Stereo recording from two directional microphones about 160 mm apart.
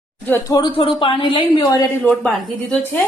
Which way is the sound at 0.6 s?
30° left (ahead or behind).